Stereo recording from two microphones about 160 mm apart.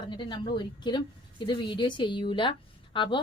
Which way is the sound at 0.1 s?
30° left (ahead or behind).